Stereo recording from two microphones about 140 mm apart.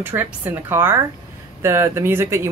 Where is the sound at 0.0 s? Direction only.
15° right (ahead or behind).